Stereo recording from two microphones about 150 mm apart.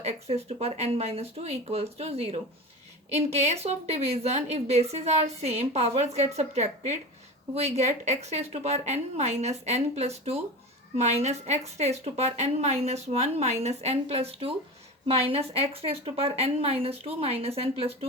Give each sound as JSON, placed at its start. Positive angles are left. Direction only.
{"t": 0.0, "sound": "a woman's voice", "side_deg": -45}